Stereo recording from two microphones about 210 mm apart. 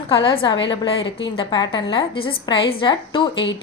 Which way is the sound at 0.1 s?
25° left (ahead or behind).